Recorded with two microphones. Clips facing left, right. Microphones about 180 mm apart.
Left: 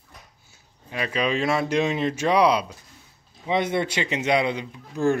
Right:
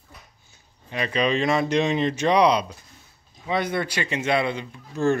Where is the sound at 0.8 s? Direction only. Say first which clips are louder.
Right 2 dB; 5° left (ahead or behind).